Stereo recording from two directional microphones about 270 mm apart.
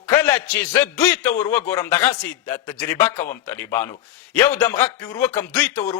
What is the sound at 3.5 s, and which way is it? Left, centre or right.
A man's voice, centre.